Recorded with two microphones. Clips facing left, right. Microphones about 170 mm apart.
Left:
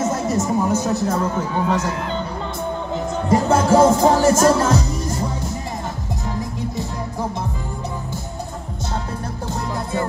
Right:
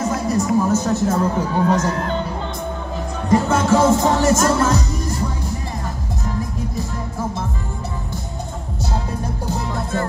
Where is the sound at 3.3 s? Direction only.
30° left (ahead or behind).